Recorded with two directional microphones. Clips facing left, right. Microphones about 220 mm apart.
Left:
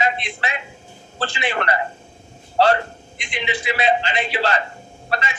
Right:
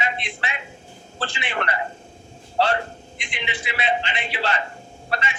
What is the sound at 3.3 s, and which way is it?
A man's voice, 40° left (ahead or behind).